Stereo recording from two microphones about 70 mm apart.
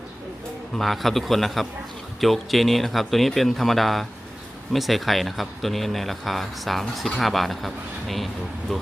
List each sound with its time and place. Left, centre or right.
0.8 s speech: centre